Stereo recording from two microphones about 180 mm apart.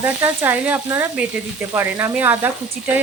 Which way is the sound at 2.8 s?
45° right (ahead or behind).